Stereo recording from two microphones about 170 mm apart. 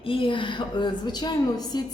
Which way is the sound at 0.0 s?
30° left (ahead or behind).